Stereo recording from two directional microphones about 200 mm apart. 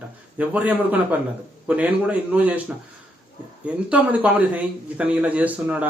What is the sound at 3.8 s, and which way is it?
Speech, 5° right (ahead or behind).